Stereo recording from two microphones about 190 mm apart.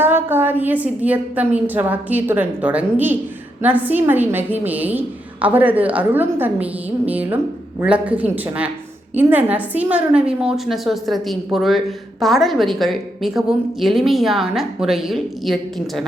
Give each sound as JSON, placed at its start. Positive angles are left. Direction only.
{"t": 0.0, "sound": "a woman's voice", "side_deg": -10}